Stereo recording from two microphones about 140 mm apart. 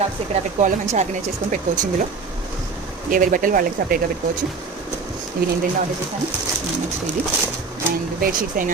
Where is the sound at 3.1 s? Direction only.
75° right (ahead or behind).